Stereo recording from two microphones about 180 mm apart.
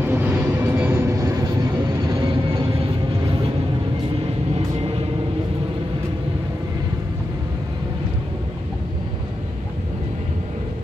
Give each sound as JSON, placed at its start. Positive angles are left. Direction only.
{"t": 0.0, "sound": "vehicle", "side_deg": -10}